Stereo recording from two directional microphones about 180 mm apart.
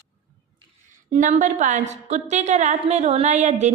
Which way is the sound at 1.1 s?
45° right (ahead or behind).